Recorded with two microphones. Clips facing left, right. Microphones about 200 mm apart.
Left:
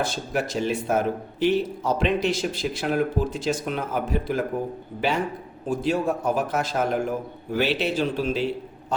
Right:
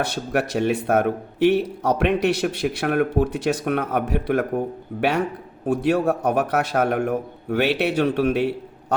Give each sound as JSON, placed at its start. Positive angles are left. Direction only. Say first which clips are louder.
{"t": 0.0, "sound": "speech", "louder": "right 3 dB", "side_deg": -65}